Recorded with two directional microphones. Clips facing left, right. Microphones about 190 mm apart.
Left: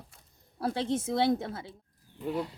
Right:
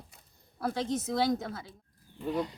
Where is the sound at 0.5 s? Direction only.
30° left (ahead or behind).